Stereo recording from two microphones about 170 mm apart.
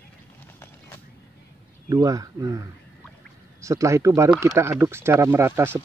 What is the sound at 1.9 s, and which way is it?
Speech, 20° right (ahead or behind).